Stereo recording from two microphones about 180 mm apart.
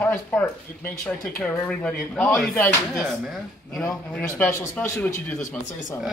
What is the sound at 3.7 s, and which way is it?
Speech, 5° left (ahead or behind).